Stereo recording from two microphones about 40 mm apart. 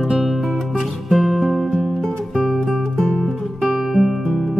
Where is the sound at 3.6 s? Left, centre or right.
Centre.